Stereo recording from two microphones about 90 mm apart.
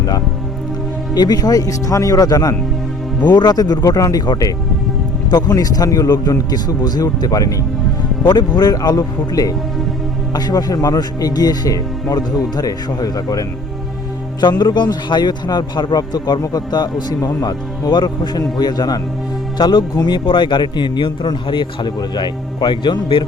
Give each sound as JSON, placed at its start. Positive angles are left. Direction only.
{"t": 1.1, "sound": "a man's voice", "side_deg": 50}
{"t": 14.4, "sound": "a man's voice", "side_deg": 55}